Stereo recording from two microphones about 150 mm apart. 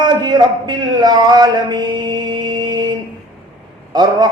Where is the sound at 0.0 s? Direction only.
30° right (ahead or behind).